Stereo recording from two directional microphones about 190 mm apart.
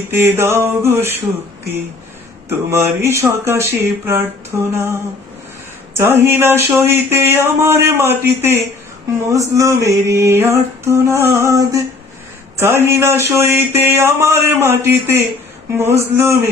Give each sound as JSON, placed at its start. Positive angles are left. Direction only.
{"t": 0.1, "sound": "speech", "side_deg": -10}
{"t": 2.5, "sound": "speech", "side_deg": -15}
{"t": 5.9, "sound": "speech", "side_deg": -10}